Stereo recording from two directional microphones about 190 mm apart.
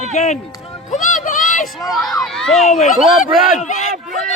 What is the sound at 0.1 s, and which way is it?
Speech, 40° left (ahead or behind).